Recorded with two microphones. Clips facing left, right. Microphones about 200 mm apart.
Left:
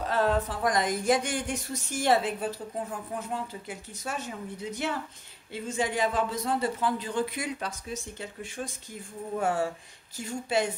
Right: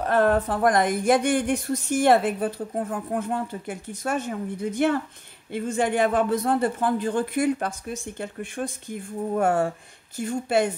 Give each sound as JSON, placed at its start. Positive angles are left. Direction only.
{"t": 0.0, "sound": "a man's voice", "side_deg": -60}